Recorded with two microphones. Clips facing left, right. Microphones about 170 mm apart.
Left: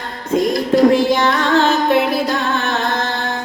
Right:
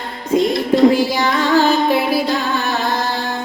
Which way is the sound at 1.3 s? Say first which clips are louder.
Right 1 dB; 5° right (ahead or behind).